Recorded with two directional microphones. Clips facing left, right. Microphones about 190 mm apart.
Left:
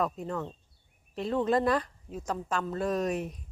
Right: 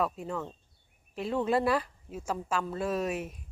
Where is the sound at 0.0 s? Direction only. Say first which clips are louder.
Left 1 dB; 5° right (ahead or behind).